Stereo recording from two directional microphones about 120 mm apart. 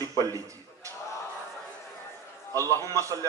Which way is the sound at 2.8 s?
25° right (ahead or behind).